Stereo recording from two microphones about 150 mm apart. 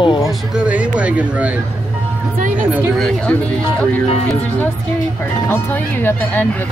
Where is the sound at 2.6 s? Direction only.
10° right (ahead or behind).